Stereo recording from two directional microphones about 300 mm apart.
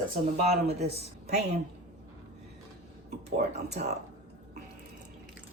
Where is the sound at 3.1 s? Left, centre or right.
Right.